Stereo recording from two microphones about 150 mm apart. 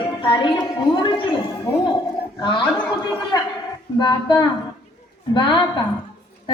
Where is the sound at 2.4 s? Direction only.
30° left (ahead or behind).